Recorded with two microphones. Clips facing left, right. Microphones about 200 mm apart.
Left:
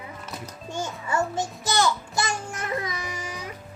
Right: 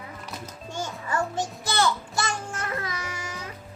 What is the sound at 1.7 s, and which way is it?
Babbling, 15° left (ahead or behind).